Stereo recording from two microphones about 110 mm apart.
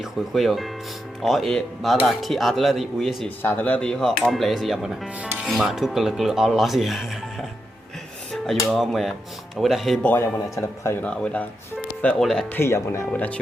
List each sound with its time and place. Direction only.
0.0 s music: centre (ahead or behind)
3.2 s music: 20° left (ahead or behind); by 7.4 s centre (ahead or behind)
8.3 s speech: centre (ahead or behind)
9.6 s music: centre (ahead or behind)
10.0 s speech: 20° left (ahead or behind)
11.0 s speech: 10° left (ahead or behind)
12.0 s music: 5° left (ahead or behind)
12.5 s speech: 25° left (ahead or behind)
13.1 s speech: 15° left (ahead or behind)